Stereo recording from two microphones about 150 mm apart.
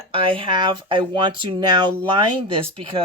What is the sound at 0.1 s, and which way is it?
Speech, 35° right (ahead or behind).